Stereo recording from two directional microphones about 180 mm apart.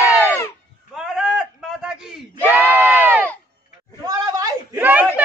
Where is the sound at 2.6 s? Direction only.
10° right (ahead or behind).